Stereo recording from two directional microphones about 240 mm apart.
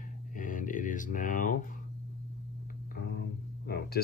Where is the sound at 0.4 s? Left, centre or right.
Left.